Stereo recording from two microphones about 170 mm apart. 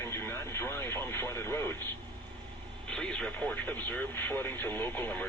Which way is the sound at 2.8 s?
5° left (ahead or behind).